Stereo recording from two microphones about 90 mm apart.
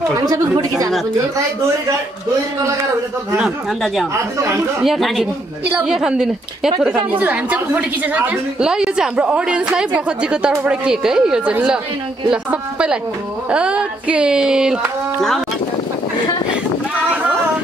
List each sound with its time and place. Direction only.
0.2 s speech: 45° right (ahead or behind)
3.3 s speech: 5° right (ahead or behind)
7.0 s a woman's voice: 20° right (ahead or behind)